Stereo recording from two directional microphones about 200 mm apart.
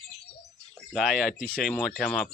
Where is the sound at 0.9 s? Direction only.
Centre (ahead or behind).